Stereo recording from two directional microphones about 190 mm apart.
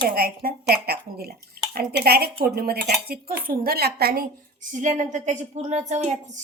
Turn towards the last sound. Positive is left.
turn(degrees=-35)  # may be behind; listen again after turning